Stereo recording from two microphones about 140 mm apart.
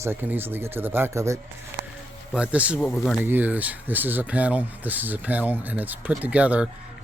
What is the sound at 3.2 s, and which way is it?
Speech, 15° right (ahead or behind).